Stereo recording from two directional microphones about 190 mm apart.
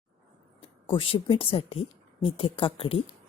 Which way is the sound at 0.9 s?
25° left (ahead or behind).